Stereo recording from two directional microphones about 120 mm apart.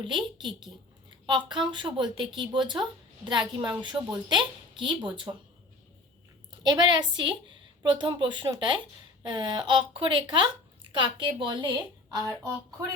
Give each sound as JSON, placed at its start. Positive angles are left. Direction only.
{"t": 0.0, "sound": "speech", "side_deg": -40}
{"t": 6.6, "sound": "speech", "side_deg": -40}
{"t": 12.0, "sound": "speech", "side_deg": -25}